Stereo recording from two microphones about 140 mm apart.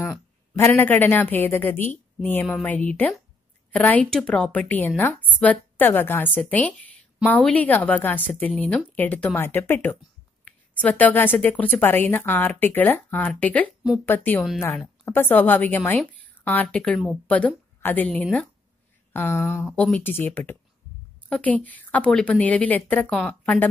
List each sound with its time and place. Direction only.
0.6 s a woman's voice: 20° left (ahead or behind)